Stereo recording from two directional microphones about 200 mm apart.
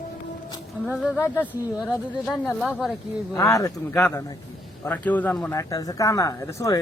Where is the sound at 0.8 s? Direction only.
Centre (ahead or behind).